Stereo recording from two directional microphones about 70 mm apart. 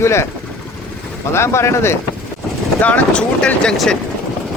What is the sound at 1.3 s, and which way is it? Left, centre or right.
Speech, left.